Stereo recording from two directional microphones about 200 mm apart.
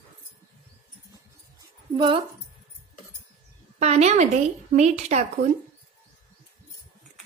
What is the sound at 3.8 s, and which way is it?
A woman's voice, 35° right (ahead or behind).